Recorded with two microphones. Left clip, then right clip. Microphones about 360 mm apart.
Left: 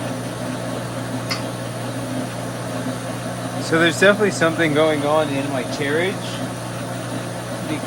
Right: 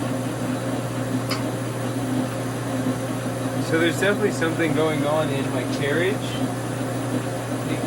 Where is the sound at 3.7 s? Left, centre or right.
Centre.